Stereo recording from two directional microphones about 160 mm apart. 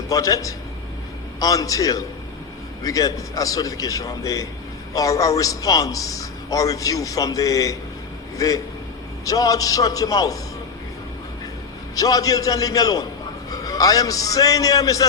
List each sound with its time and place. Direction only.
0.1 s a man's voice: 20° left (ahead or behind)
11.9 s a man's voice: 20° left (ahead or behind)